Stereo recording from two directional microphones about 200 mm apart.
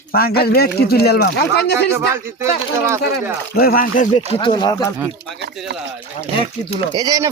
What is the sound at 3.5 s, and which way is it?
Speech, 50° left (ahead or behind).